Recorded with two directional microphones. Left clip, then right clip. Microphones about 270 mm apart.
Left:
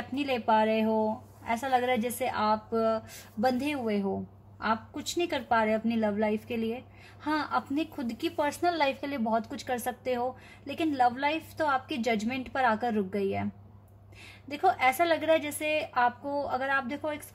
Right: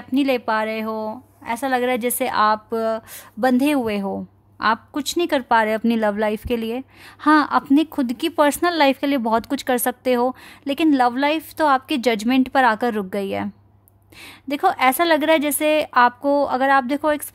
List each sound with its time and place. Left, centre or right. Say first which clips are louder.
0.1 s a woman's voice: right 7 dB; right
14.5 s a woman's voice: right 8 dB; right